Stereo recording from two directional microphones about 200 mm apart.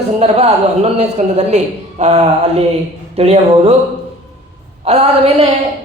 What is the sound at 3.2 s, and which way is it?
Speech, 30° right (ahead or behind).